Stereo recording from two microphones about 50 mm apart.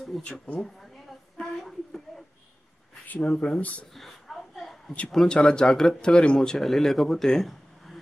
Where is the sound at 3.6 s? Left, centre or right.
Left.